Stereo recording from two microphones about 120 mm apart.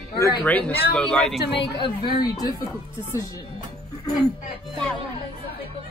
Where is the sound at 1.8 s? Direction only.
35° left (ahead or behind).